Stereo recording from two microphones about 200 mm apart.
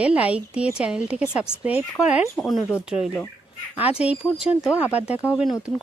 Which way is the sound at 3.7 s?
30° left (ahead or behind).